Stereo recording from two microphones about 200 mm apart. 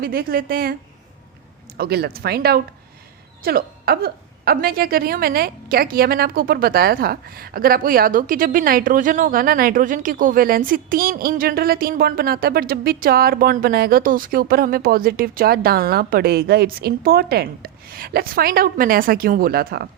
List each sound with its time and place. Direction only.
0.0 s speech: 50° right (ahead or behind)